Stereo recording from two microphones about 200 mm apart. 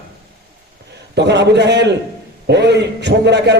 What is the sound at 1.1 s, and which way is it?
A man's voice, 60° right (ahead or behind).